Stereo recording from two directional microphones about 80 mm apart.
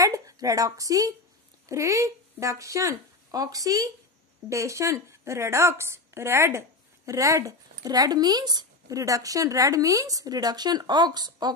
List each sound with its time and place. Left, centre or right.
0.0 s a woman's voice: right